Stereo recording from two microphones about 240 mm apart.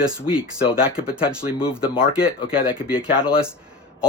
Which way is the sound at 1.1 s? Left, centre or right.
Centre.